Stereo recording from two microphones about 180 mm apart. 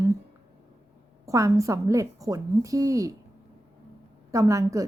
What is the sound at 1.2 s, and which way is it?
Speech, 15° right (ahead or behind).